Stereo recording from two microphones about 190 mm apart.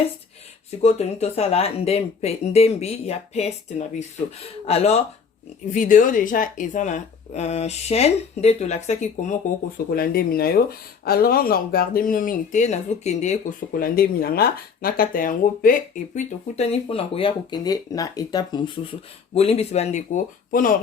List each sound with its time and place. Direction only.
0.8 s speech: 35° left (ahead or behind)
9.9 s speech: 55° left (ahead or behind)